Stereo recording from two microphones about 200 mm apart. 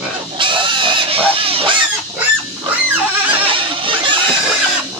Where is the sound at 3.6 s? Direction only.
25° right (ahead or behind).